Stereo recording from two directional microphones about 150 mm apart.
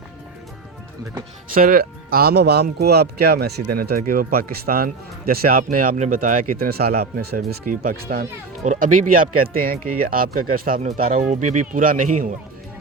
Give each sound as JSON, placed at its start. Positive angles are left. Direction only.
{"t": 1.5, "sound": "speech", "side_deg": -70}
{"t": 8.6, "sound": "speech", "side_deg": -55}
{"t": 10.8, "sound": "speech", "side_deg": -60}